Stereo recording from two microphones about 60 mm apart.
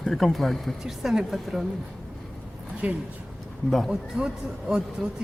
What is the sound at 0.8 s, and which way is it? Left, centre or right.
Speech, centre.